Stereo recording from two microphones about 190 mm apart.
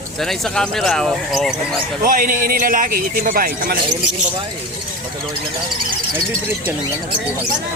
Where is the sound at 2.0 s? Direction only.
45° right (ahead or behind).